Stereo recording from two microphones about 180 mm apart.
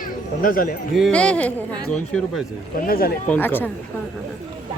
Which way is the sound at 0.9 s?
Centre (ahead or behind).